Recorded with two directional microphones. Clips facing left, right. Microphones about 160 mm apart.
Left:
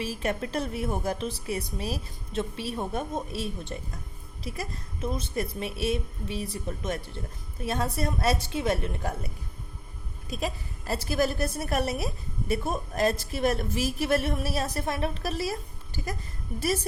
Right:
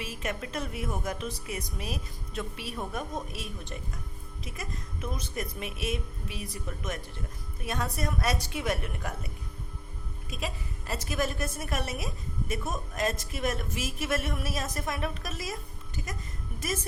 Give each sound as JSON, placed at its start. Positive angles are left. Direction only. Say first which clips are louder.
{"t": 0.0, "sound": "a woman's voice", "louder": "left 5 dB", "side_deg": 35}
{"t": 10.2, "sound": "a woman's voice", "louder": "left 5 dB", "side_deg": 35}